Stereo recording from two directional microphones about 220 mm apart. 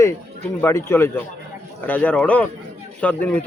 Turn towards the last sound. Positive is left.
turn(degrees=5)  # may be behind; listen again after turning